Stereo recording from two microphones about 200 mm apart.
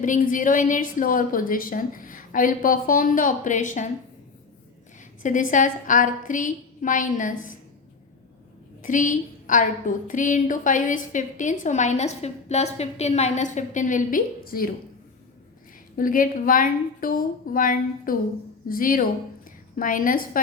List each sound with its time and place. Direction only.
0.0 s a woman's voice: 40° left (ahead or behind)
5.2 s a woman's voice: 40° left (ahead or behind)
8.8 s a woman's voice: 40° left (ahead or behind)
16.0 s a woman's voice: 45° left (ahead or behind)